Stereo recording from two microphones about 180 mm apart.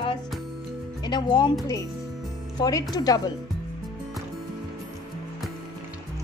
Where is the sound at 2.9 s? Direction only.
20° left (ahead or behind).